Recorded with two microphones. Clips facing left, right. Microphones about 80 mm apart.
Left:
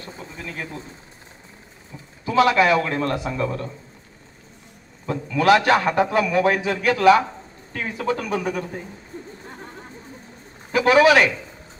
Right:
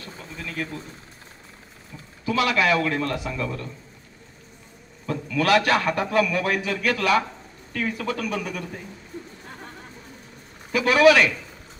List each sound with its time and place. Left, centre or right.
0.0 s a sound: left
2.2 s a man's voice: left
5.0 s a man's voice: left
10.7 s a man's voice: left